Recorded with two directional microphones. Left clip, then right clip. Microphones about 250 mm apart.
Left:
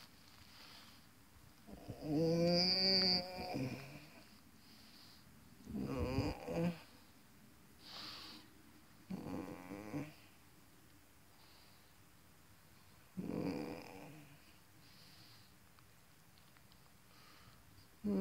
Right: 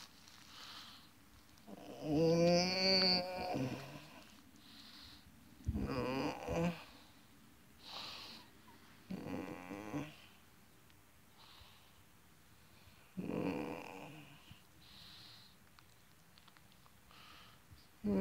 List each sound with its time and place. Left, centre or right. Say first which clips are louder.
0.0 s a sound: right 3 dB; right
1.8 s a sound: right 3 dB; centre
7.8 s sniff: right 2 dB; centre
9.1 s dog: right 2 dB; centre
13.2 s dog: right 2 dB; centre
15.0 s snort: right 7 dB; centre